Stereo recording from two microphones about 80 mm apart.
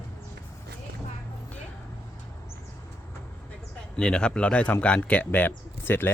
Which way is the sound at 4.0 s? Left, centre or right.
Centre.